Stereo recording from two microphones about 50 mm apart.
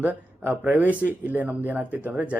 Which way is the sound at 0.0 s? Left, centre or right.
Right.